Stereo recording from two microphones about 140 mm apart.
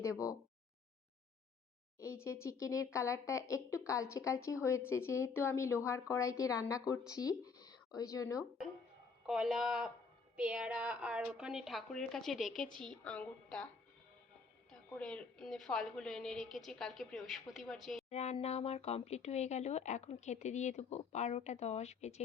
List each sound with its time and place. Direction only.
0.0 s speech: 25° left (ahead or behind)
2.0 s speech: 20° left (ahead or behind)
9.2 s a woman's voice: 5° right (ahead or behind)
14.7 s a woman's voice: 5° left (ahead or behind)
18.1 s speech: 50° left (ahead or behind)